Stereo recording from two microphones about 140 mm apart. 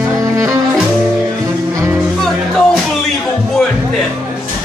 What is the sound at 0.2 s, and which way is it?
Music, 20° right (ahead or behind).